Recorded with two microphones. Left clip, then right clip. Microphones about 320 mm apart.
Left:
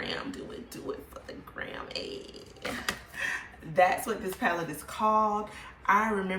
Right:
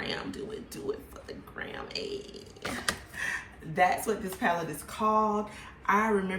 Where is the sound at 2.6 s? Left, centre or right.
Centre.